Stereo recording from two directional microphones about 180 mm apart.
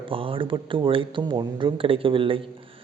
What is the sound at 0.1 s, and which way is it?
Speech, 30° right (ahead or behind).